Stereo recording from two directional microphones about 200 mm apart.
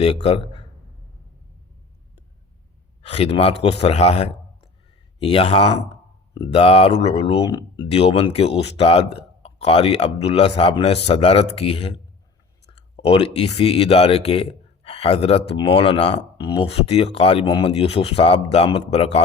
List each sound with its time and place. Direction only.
0.0 s speech: 30° left (ahead or behind)
3.0 s a man's voice: 30° left (ahead or behind)